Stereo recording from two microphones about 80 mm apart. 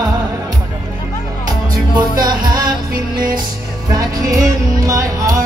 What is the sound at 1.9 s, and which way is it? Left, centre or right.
Music, right.